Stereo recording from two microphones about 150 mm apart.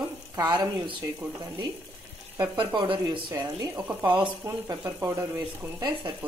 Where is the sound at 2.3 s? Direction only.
30° right (ahead or behind).